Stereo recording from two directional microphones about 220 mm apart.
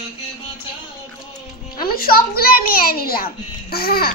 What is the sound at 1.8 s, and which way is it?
A child's voice, 45° left (ahead or behind).